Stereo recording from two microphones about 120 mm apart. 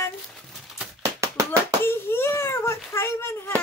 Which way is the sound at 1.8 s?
20° left (ahead or behind).